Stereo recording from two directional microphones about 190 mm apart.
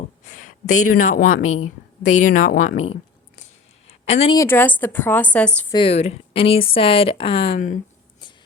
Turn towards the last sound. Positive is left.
turn(degrees=45)  # may be behind; listen again after turning